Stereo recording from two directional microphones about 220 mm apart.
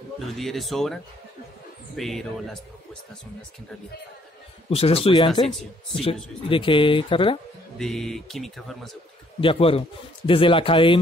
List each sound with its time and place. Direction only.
0.4 s speech: centre (ahead or behind)
2.0 s speech: centre (ahead or behind)
4.6 s a man's voice: 25° left (ahead or behind)
6.5 s a man's voice: 25° left (ahead or behind)
7.8 s speech: centre (ahead or behind)
9.4 s a man's voice: 25° left (ahead or behind)